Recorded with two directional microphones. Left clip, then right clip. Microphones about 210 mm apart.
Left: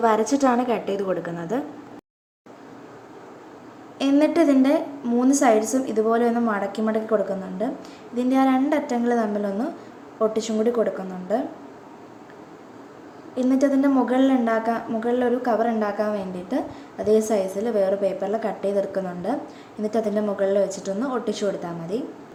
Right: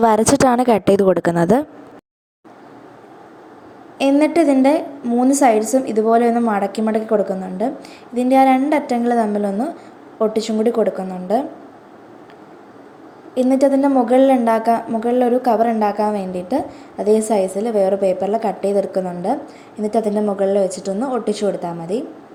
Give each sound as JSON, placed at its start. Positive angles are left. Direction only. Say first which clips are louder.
{"t": 0.0, "sound": "a woman's voice", "louder": "right 6 dB", "side_deg": -50}
{"t": 3.9, "sound": "a woman's voice", "louder": "right 5 dB", "side_deg": -20}
{"t": 13.3, "sound": "a woman's voice", "louder": "right 6 dB", "side_deg": -25}